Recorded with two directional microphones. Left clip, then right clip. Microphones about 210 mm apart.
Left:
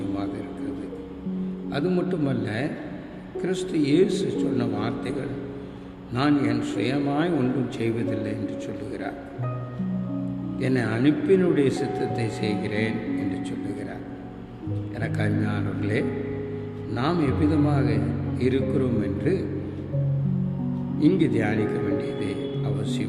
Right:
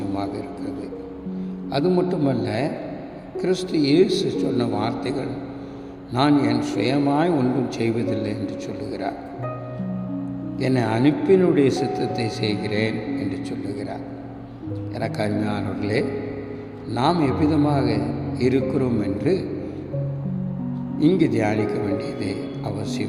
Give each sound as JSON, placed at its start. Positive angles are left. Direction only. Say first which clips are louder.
{"t": 1.7, "sound": "a man's voice", "louder": "right 5 dB", "side_deg": -20}
{"t": 6.1, "sound": "a man's voice", "louder": "right 4 dB", "side_deg": -20}
{"t": 10.6, "sound": "a man's voice", "louder": "right 4 dB", "side_deg": -20}
{"t": 15.0, "sound": "a man's voice", "louder": "right 4 dB", "side_deg": -20}
{"t": 21.0, "sound": "a man's voice", "louder": "right 3 dB", "side_deg": -20}
{"t": 21.9, "sound": "music", "louder": "right 1 dB", "side_deg": -20}
{"t": 22.8, "sound": "speech", "louder": "right 2 dB", "side_deg": -20}